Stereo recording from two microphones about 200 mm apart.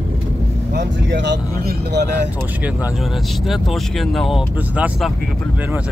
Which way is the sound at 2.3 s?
5° right (ahead or behind).